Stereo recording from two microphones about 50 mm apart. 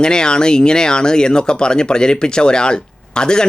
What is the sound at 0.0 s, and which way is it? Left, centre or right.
Speech, centre.